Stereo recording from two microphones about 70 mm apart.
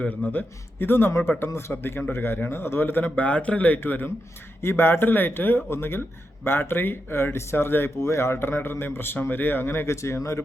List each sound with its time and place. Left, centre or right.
0.0 s speech: left